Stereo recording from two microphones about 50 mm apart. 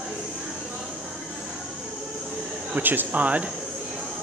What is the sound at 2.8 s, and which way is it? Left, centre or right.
Speech, right.